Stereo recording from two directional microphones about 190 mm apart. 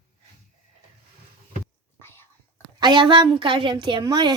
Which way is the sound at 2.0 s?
10° left (ahead or behind).